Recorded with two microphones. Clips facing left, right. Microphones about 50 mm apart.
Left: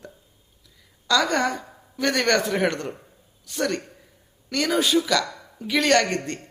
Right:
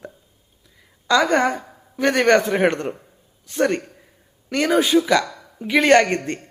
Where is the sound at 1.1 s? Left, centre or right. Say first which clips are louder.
Right 4 dB; right.